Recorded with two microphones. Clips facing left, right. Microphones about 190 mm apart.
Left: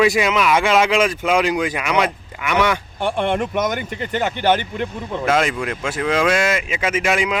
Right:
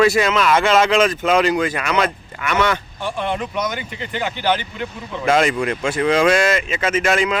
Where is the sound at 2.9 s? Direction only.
55° left (ahead or behind).